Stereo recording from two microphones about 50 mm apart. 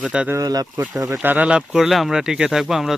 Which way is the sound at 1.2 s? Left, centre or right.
Right.